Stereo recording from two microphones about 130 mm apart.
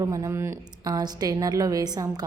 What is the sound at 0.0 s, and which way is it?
A woman's voice, 25° right (ahead or behind).